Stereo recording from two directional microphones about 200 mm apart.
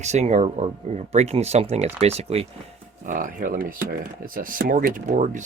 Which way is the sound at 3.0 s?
40° right (ahead or behind).